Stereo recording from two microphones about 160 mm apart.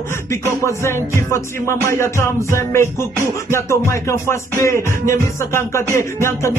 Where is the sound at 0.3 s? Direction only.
15° left (ahead or behind).